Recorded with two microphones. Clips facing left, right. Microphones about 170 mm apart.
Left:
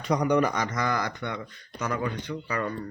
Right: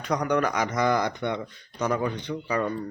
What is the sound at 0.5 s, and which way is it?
Speech, 10° right (ahead or behind).